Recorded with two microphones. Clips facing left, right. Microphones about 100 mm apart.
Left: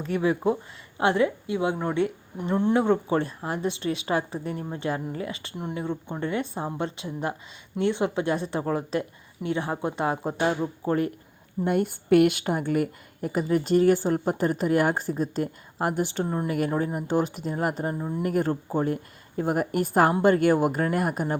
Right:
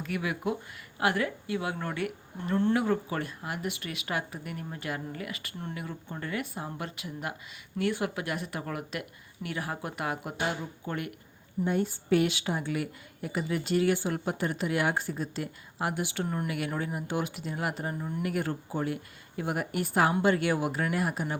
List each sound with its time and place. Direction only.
0.0 s speech: 30° left (ahead or behind); by 2.7 s 15° left (ahead or behind)
2.7 s speech: 30° left (ahead or behind)
11.6 s a woman's voice: 55° left (ahead or behind); by 16.2 s 40° left (ahead or behind)
16.2 s speech: 25° left (ahead or behind)
16.5 s speech: 35° left (ahead or behind)
17.9 s speech: 25° left (ahead or behind)
18.2 s a woman's voice: 35° left (ahead or behind)